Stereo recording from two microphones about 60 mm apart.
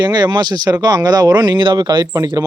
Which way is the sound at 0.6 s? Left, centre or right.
Right.